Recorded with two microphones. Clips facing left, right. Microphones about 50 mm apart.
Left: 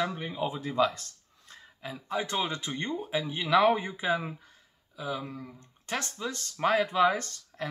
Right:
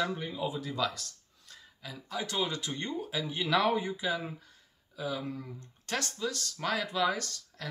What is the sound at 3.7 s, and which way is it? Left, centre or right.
Speech, left.